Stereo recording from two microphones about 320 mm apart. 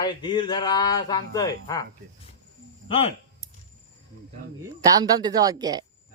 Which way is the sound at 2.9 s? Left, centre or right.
Centre.